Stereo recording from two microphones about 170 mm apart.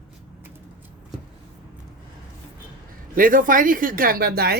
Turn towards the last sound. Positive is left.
turn(degrees=-65)  # may be behind; listen again after turning